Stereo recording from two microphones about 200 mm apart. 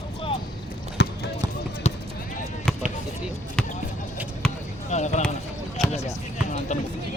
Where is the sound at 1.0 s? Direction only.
60° left (ahead or behind).